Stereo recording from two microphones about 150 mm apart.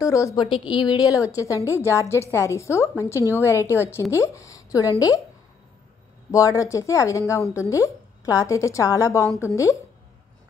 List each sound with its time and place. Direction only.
0.0 s a woman's voice: 20° left (ahead or behind)
0.5 s a woman's voice: 30° left (ahead or behind)
6.3 s a woman's voice: 20° left (ahead or behind)